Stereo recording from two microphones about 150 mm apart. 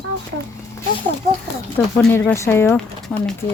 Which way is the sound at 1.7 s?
15° left (ahead or behind).